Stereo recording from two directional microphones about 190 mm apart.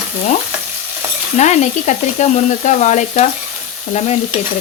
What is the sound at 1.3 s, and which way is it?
Speech, 35° left (ahead or behind).